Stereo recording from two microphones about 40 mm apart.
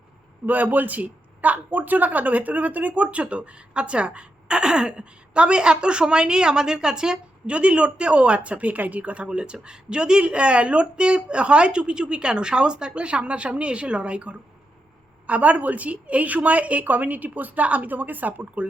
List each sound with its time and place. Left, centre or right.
0.4 s a man's voice: right; by 7.5 s centre
7.5 s a woman's voice: right